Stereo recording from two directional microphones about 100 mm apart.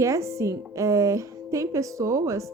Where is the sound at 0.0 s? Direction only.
30° right (ahead or behind).